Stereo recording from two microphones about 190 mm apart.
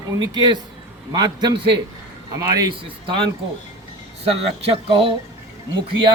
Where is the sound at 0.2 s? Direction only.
20° right (ahead or behind).